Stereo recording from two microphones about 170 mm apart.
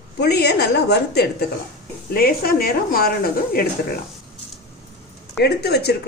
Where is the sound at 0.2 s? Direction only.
70° left (ahead or behind).